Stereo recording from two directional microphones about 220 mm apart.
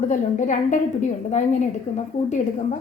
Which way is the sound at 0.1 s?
35° left (ahead or behind).